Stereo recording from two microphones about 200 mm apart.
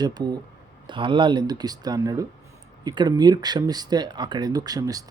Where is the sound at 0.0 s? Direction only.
20° right (ahead or behind).